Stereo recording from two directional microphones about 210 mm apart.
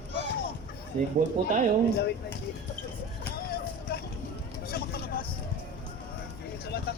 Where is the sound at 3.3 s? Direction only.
45° left (ahead or behind).